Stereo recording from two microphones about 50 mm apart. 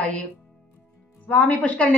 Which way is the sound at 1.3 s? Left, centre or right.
Left.